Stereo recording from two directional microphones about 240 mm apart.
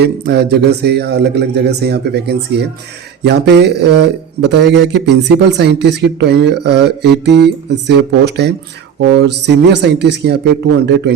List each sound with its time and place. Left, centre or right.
0.0 s speech: right